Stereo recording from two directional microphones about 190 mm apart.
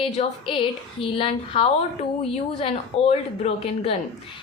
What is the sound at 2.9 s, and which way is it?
A woman's voice, 30° left (ahead or behind).